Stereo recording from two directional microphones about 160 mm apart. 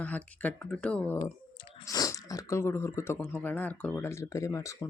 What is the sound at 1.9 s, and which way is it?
Speech, 20° left (ahead or behind).